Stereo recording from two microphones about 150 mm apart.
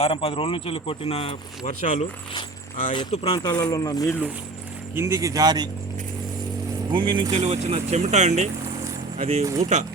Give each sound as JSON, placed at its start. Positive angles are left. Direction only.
{"t": 0.0, "sound": "speech", "side_deg": 40}
{"t": 2.9, "sound": "speech", "side_deg": 35}
{"t": 4.9, "sound": "speech", "side_deg": -15}
{"t": 6.9, "sound": "speech", "side_deg": -30}
{"t": 7.3, "sound": "speech", "side_deg": -50}